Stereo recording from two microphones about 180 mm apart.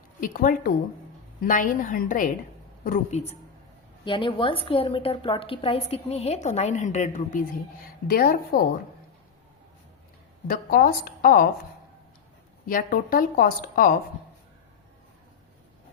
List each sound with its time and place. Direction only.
0.2 s a woman's voice: 50° left (ahead or behind)
4.0 s a woman's voice: 25° left (ahead or behind)
8.0 s a woman's voice: 55° left (ahead or behind)
10.4 s a woman's voice: 55° left (ahead or behind)
12.6 s a woman's voice: 50° left (ahead or behind)